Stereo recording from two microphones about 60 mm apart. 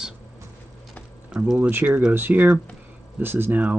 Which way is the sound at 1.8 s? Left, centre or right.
Right.